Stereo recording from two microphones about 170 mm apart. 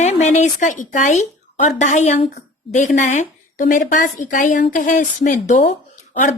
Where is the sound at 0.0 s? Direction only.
40° left (ahead or behind).